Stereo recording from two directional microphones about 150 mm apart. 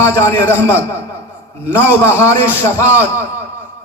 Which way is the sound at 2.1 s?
15° left (ahead or behind).